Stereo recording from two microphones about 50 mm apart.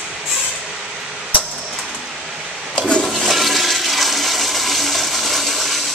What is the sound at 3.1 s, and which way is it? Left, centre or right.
Toilet flush, centre.